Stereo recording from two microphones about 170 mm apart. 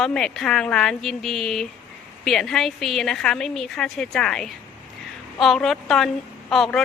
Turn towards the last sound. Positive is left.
turn(degrees=0)  # may be behind; listen again after turning